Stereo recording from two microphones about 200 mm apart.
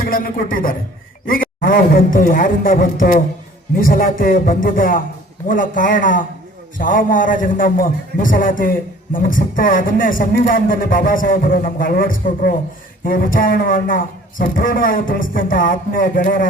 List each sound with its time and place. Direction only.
0.0 s a man's voice: 45° left (ahead or behind)